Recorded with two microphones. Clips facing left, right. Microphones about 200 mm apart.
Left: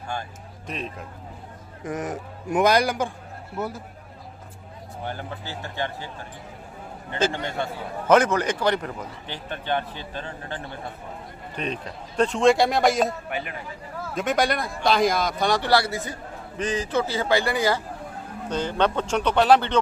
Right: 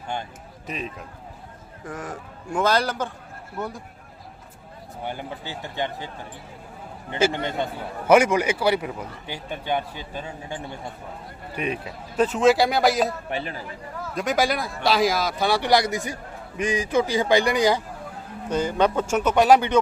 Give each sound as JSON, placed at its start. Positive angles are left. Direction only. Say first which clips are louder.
{"t": 0.1, "sound": "speech", "louder": "right 1 dB", "side_deg": -20}
{"t": 0.7, "sound": "a man's voice", "louder": "even", "side_deg": 0}
{"t": 1.8, "sound": "a man's voice", "louder": "left 5 dB", "side_deg": 20}
{"t": 5.0, "sound": "a man's voice", "louder": "right 1 dB", "side_deg": -15}
{"t": 7.1, "sound": "a man's voice", "louder": "right 2 dB", "side_deg": -10}
{"t": 13.3, "sound": "speech", "louder": "right 2 dB", "side_deg": -30}
{"t": 14.2, "sound": "a man's voice", "louder": "even", "side_deg": 0}